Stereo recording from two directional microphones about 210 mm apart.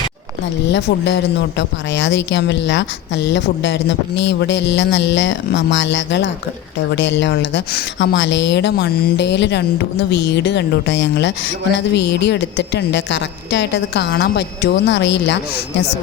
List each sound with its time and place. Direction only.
0.6 s a woman's voice: 60° left (ahead or behind)